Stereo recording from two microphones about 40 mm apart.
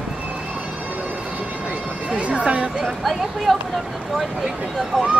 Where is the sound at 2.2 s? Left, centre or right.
Right.